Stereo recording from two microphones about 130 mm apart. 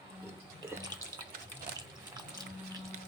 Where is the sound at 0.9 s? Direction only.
30° right (ahead or behind).